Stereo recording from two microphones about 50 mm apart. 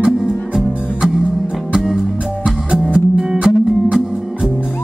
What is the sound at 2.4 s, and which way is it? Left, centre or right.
Music, centre.